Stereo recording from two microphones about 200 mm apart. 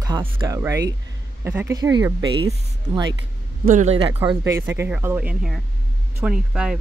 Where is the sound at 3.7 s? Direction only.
35° right (ahead or behind).